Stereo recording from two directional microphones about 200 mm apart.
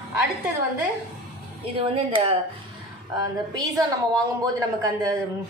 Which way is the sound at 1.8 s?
25° right (ahead or behind).